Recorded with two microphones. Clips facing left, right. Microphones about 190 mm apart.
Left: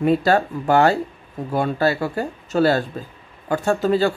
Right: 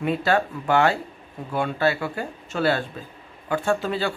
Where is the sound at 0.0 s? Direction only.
40° left (ahead or behind).